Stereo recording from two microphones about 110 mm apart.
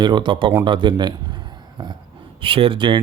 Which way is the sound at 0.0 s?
45° right (ahead or behind).